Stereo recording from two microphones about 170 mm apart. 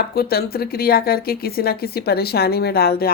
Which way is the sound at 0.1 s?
65° left (ahead or behind).